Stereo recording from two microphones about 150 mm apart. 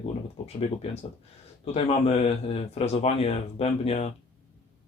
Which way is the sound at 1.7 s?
45° left (ahead or behind).